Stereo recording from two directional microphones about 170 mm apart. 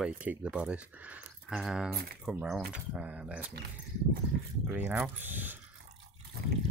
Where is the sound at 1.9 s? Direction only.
65° right (ahead or behind).